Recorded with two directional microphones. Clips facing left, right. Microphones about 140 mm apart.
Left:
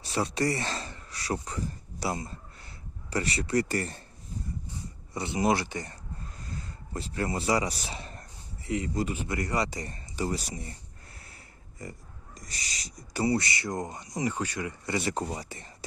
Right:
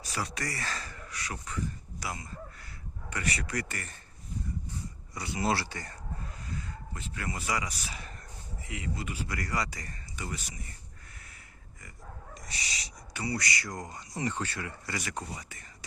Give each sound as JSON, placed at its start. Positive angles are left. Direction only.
{"t": 0.0, "sound": "speech", "side_deg": 30}
{"t": 5.1, "sound": "speech", "side_deg": 25}
{"t": 6.6, "sound": "a man's voice", "side_deg": 35}
{"t": 9.1, "sound": "speech", "side_deg": 25}
{"t": 11.8, "sound": "owl", "side_deg": 35}
{"t": 13.2, "sound": "speech", "side_deg": 25}